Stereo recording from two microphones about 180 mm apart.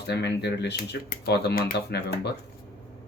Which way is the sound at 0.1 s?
70° left (ahead or behind).